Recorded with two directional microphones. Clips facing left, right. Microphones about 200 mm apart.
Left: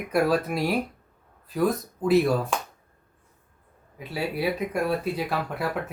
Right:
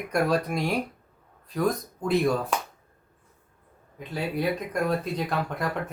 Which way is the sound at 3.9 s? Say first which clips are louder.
Even; 5° left (ahead or behind).